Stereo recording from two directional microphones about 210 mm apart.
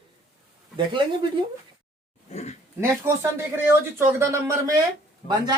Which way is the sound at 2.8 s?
10° right (ahead or behind).